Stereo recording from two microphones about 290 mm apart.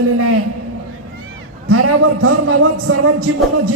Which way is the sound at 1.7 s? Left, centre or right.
Right.